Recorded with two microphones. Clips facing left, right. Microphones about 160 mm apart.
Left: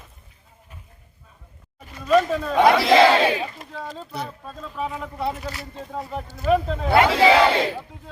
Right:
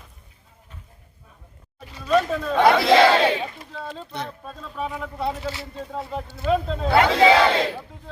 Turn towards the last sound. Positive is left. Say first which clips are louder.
# even
turn(degrees=5)  # may be behind; listen again after turning